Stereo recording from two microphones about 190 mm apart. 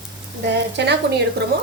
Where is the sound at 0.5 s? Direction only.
65° right (ahead or behind).